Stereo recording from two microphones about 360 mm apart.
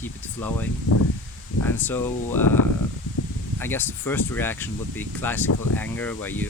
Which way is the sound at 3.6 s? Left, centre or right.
Centre.